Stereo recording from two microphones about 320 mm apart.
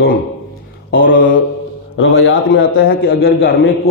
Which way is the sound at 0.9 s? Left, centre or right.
Left.